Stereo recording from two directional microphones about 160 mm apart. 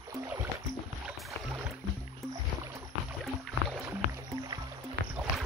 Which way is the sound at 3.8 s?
20° right (ahead or behind).